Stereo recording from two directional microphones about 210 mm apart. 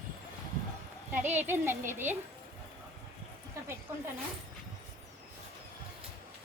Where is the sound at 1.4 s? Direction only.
10° right (ahead or behind).